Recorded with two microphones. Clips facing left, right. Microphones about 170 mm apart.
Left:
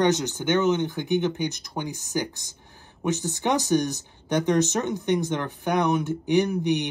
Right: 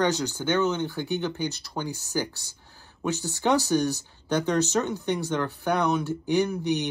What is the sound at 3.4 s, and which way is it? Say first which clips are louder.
Speech: even; 15° left (ahead or behind).